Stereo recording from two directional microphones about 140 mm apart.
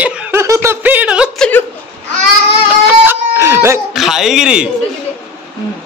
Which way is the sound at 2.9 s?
15° right (ahead or behind).